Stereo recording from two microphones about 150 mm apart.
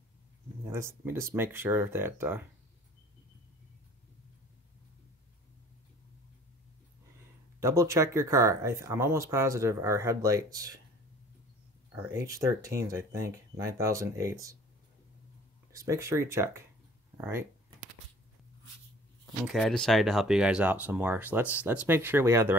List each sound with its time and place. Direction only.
0.7 s speech: 15° right (ahead or behind)
7.6 s speech: 20° right (ahead or behind)
12.1 s speech: 20° right (ahead or behind)
15.7 s speech: 20° right (ahead or behind)
19.4 s speech: centre (ahead or behind); by 22.6 s 15° right (ahead or behind)